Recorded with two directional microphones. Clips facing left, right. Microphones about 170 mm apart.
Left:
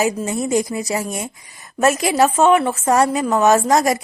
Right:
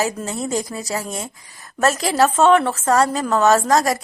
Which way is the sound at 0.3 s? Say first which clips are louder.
Left 4 dB; 15° left (ahead or behind).